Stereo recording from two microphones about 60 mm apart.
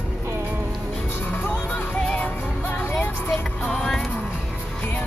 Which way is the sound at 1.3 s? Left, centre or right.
Left.